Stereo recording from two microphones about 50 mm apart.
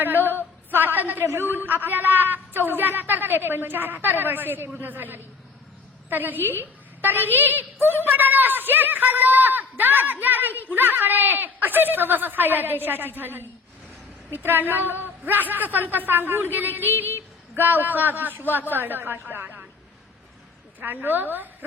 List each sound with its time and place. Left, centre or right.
0.0 s a woman's voice: right
1.2 s a woman's voice: right
20.7 s speech: right